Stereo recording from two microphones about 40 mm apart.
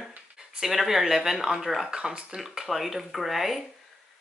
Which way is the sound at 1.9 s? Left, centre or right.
Centre.